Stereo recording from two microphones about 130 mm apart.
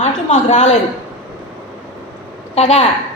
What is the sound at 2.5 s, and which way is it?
Speech, 55° left (ahead or behind).